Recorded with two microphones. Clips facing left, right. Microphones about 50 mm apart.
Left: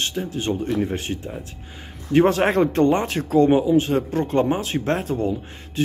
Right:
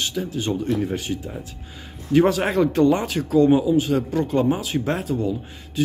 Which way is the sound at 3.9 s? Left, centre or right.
Left.